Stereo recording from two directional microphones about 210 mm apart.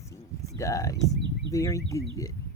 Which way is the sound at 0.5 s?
15° left (ahead or behind).